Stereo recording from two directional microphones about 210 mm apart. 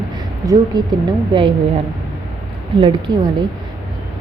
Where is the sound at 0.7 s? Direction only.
20° right (ahead or behind).